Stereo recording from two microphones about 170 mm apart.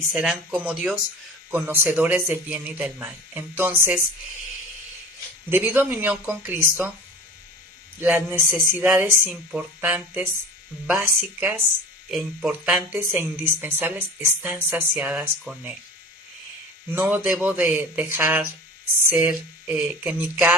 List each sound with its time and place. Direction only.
0.1 s speech: 5° right (ahead or behind)
5.5 s speech: 10° right (ahead or behind)
8.0 s speech: 10° right (ahead or behind)
16.9 s speech: 10° right (ahead or behind)